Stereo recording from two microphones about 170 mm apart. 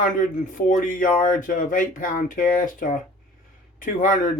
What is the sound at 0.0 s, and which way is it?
Speech, 50° left (ahead or behind).